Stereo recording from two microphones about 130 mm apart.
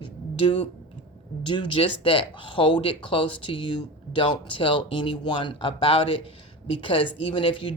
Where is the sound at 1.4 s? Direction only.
40° left (ahead or behind).